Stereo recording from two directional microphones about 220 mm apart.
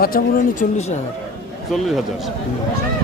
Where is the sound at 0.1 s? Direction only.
40° left (ahead or behind).